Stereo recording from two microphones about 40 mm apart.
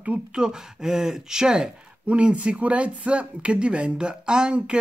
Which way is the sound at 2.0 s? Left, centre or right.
Right.